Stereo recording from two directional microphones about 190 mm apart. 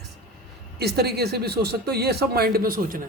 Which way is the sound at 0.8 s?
55° right (ahead or behind).